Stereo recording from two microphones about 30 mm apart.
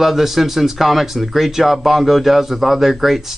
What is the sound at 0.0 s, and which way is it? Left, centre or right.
Speech, centre.